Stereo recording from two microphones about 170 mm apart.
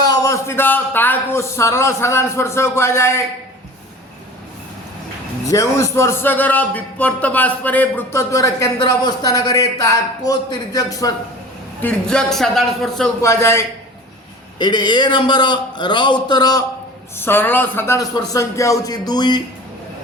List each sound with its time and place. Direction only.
0.1 s a man's voice: 15° left (ahead or behind)
5.5 s a man's voice: 20° left (ahead or behind)
11.8 s a man's voice: 5° left (ahead or behind)
13.2 s a man's voice: 15° left (ahead or behind)
17.2 s a man's voice: 15° left (ahead or behind)